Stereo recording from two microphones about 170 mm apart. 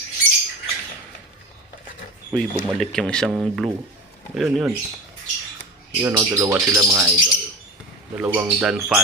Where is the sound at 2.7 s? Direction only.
5° left (ahead or behind).